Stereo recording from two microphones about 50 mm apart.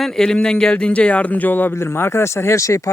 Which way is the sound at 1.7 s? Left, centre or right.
Left.